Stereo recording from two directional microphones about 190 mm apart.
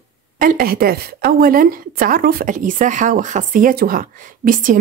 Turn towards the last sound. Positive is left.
turn(degrees=-45)  # may be behind; listen again after turning